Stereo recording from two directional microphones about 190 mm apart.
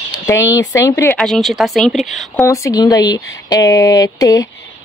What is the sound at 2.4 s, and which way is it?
Speech, 15° left (ahead or behind).